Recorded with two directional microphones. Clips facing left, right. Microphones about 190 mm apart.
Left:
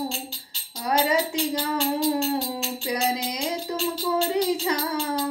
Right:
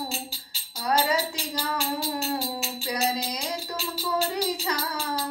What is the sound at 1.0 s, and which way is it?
Music, 25° left (ahead or behind).